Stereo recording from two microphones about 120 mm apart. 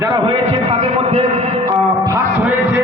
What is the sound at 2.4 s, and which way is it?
Speech, 15° right (ahead or behind).